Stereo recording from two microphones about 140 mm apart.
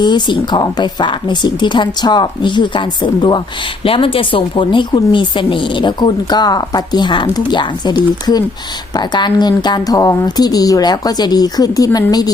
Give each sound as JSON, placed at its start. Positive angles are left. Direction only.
{"t": 0.0, "sound": "a woman's voice", "side_deg": 35}